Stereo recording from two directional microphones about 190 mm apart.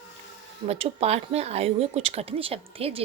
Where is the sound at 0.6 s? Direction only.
30° right (ahead or behind).